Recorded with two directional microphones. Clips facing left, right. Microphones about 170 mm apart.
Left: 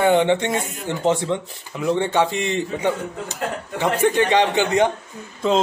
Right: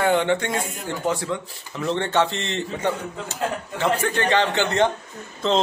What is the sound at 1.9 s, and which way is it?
A man's voice, 10° left (ahead or behind).